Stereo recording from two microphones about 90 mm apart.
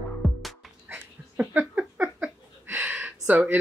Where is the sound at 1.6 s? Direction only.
10° right (ahead or behind).